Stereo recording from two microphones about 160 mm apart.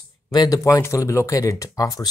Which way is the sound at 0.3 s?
25° left (ahead or behind).